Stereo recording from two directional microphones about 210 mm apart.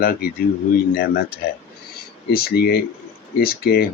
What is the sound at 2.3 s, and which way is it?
Speech, 45° left (ahead or behind).